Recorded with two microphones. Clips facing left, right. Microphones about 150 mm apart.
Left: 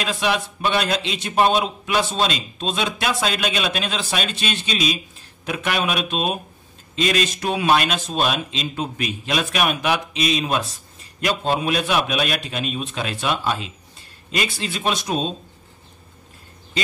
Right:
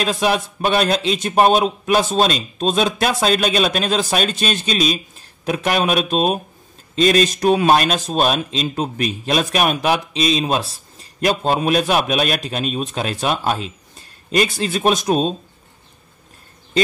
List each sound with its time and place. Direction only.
0.0 s speech: 40° right (ahead or behind)